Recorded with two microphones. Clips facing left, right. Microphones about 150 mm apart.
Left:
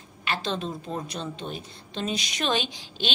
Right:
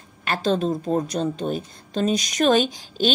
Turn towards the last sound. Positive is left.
turn(degrees=-45)  # may be behind; listen again after turning